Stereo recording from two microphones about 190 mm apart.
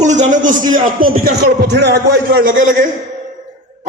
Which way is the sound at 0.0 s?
40° right (ahead or behind).